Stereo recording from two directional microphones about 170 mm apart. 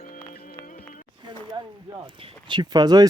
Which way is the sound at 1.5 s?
30° right (ahead or behind).